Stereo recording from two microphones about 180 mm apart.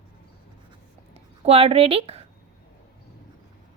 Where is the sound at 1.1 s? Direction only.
35° right (ahead or behind).